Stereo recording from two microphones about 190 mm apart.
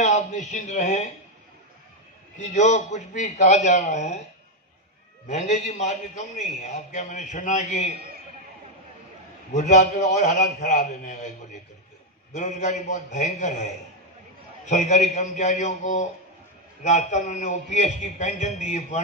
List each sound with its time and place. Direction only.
0.0 s a man's voice: 40° left (ahead or behind)
2.3 s a man's voice: 40° left (ahead or behind)
5.3 s a man's voice: 40° left (ahead or behind)
9.5 s a man's voice: 40° left (ahead or behind)
12.4 s a man's voice: 40° left (ahead or behind)
14.7 s a man's voice: 40° left (ahead or behind)